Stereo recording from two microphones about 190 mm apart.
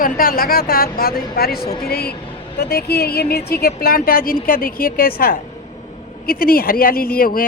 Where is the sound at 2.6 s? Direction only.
55° left (ahead or behind).